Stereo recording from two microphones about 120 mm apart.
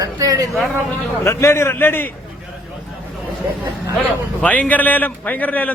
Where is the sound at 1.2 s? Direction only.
20° left (ahead or behind).